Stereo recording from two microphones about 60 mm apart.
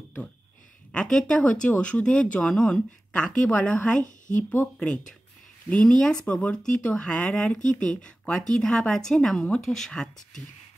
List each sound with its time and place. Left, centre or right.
0.9 s speech: centre